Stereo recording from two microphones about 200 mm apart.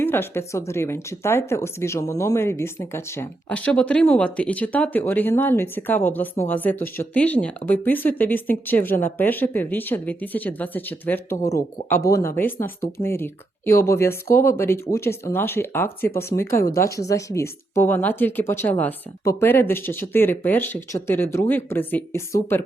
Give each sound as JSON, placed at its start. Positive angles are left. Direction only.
{"t": 0.0, "sound": "speech", "side_deg": 10}